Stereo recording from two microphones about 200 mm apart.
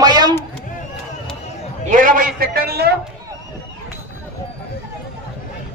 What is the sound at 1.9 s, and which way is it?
A man's voice, 40° right (ahead or behind).